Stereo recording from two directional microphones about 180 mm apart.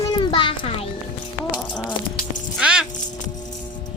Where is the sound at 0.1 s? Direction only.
25° left (ahead or behind).